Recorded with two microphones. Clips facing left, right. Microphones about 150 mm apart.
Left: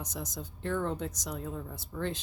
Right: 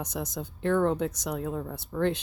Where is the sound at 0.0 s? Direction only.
65° right (ahead or behind).